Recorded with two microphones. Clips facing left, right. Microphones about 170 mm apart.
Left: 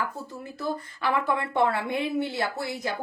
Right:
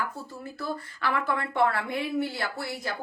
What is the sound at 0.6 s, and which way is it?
A woman's voice, 20° left (ahead or behind).